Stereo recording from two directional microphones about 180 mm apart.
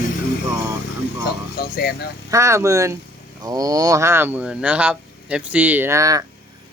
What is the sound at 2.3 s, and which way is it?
Speech, 15° right (ahead or behind).